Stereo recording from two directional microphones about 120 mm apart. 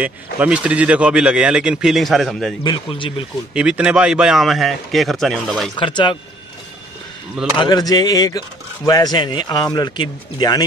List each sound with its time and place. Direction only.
0.0 s speech: 10° right (ahead or behind)
2.6 s speech: 40° left (ahead or behind)
3.5 s speech: 10° right (ahead or behind)
5.8 s speech: 40° left (ahead or behind)
7.5 s speech: 35° left (ahead or behind)